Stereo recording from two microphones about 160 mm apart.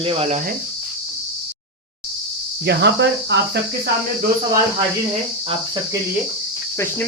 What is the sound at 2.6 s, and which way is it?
Cricket, 90° right.